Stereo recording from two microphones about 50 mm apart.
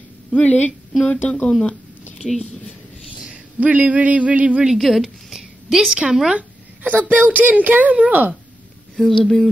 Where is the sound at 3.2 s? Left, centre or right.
Right.